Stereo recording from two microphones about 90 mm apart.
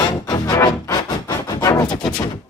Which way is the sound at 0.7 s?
45° left (ahead or behind).